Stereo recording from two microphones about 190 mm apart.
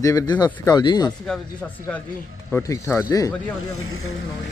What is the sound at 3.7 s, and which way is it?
Speech, 90° left.